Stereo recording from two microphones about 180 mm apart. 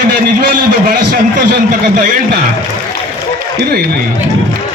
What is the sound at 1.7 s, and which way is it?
Speech, 50° right (ahead or behind).